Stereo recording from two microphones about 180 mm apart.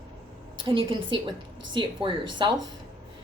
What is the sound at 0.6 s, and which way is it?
A woman's voice, 30° right (ahead or behind).